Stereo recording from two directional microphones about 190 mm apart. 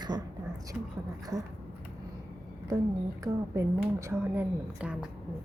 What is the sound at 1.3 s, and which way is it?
Speech, 15° right (ahead or behind).